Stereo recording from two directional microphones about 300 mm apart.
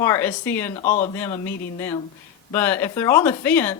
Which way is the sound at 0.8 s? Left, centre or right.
Left.